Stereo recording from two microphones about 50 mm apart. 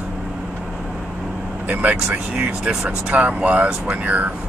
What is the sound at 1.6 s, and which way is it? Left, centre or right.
Speech, right.